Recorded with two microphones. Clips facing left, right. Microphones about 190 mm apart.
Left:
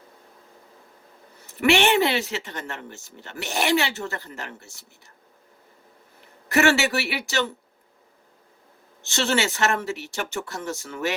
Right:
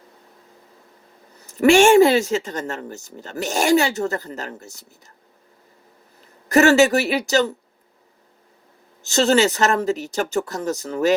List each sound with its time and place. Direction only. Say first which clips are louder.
1.6 s speech: right 8 dB; 45° right (ahead or behind)
6.5 s speech: right 7 dB; 40° right (ahead or behind)
9.0 s speech: right 8 dB; 40° right (ahead or behind)